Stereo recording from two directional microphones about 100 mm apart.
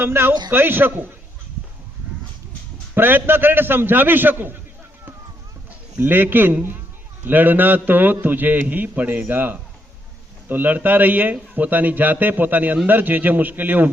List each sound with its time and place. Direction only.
0.0 s a man's voice: 25° right (ahead or behind)
2.9 s a man's voice: 20° right (ahead or behind)
6.0 s a man's voice: 20° right (ahead or behind)